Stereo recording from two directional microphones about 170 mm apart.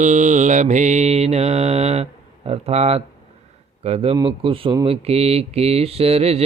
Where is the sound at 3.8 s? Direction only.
35° right (ahead or behind).